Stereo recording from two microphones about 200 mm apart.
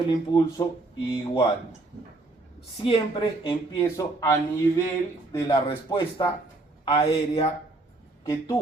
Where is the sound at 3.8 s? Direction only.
15° left (ahead or behind).